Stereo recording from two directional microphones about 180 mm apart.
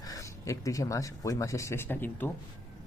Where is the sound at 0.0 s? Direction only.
20° left (ahead or behind).